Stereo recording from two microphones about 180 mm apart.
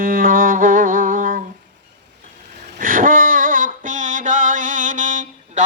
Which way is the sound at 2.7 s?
50° right (ahead or behind).